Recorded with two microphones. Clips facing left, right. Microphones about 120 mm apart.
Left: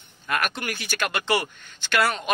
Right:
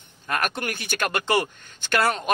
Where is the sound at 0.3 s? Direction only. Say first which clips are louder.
Even; 40° right (ahead or behind).